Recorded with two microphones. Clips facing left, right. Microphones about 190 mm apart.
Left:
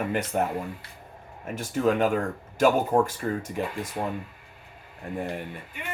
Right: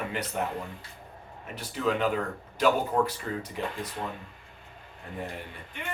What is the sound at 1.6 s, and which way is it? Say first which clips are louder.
Speech: left 5 dB; 45° left (ahead or behind).